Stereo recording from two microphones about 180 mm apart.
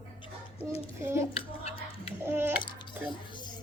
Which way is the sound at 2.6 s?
25° left (ahead or behind).